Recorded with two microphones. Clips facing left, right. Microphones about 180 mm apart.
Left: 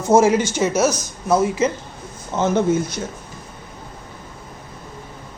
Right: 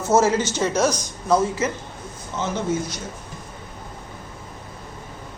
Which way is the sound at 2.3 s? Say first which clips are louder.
Left 8 dB; 50° left (ahead or behind).